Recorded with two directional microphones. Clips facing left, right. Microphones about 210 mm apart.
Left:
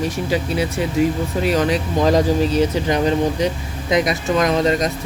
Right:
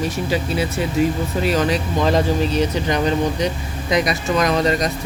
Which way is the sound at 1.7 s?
40° left (ahead or behind).